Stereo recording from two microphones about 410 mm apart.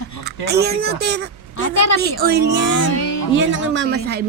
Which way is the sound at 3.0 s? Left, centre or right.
Left.